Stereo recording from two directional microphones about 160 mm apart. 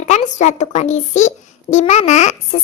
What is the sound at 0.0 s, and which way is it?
A child's voice, 45° left (ahead or behind).